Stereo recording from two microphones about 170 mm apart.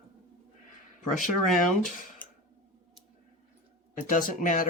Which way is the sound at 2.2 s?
10° left (ahead or behind).